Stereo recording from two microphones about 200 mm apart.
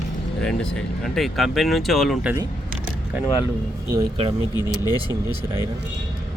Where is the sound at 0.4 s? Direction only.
5° left (ahead or behind).